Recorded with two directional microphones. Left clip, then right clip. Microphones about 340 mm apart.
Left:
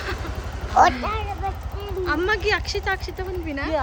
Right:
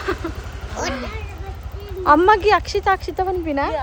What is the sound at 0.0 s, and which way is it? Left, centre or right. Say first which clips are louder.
Vehicle: right 5 dB; centre.